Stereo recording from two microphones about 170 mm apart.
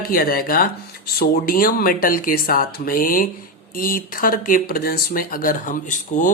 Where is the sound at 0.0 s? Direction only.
60° left (ahead or behind).